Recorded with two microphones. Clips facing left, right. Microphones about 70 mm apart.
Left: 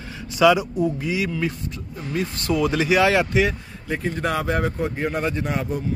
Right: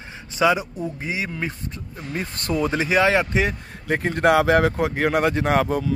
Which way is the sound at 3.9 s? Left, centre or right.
Right.